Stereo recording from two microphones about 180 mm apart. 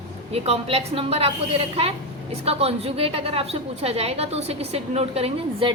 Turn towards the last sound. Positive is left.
turn(degrees=-30)  # may be behind; listen again after turning